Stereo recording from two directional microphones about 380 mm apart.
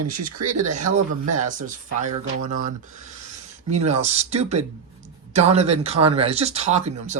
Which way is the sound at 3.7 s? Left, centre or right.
Centre.